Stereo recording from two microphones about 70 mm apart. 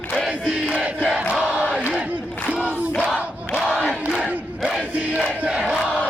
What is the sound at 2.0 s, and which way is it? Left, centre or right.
Battle cry, centre.